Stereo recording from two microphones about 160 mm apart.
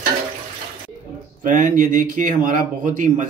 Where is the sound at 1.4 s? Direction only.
55° right (ahead or behind).